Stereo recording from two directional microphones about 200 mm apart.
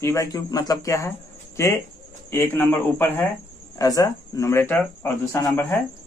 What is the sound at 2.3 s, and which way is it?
Speech, 10° left (ahead or behind).